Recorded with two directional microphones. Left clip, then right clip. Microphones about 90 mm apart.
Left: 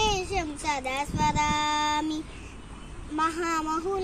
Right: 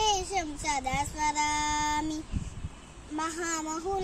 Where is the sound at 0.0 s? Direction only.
50° right (ahead or behind).